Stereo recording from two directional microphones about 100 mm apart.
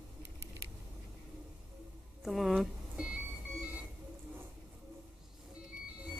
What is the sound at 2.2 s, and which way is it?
Speech, 5° right (ahead or behind).